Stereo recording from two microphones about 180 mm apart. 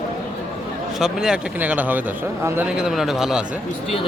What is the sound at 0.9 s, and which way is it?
A man's voice, centre (ahead or behind).